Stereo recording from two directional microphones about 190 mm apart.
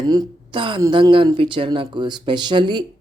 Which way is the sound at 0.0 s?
20° right (ahead or behind).